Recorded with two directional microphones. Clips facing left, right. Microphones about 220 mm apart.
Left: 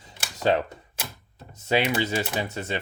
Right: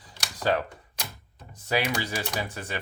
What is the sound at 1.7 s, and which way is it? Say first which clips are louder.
Speech: left 4 dB; 25° left (ahead or behind).